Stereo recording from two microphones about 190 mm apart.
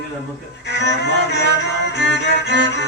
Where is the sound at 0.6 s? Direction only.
65° left (ahead or behind).